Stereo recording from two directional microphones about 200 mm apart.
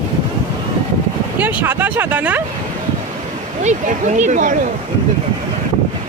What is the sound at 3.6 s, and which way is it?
Speech, 35° right (ahead or behind).